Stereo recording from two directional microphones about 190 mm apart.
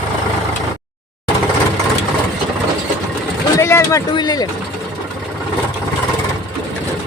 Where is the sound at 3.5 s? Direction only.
15° left (ahead or behind).